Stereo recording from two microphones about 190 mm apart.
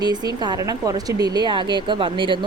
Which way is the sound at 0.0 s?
20° right (ahead or behind).